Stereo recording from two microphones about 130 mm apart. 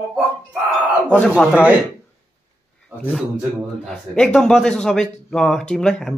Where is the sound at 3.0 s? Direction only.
10° left (ahead or behind).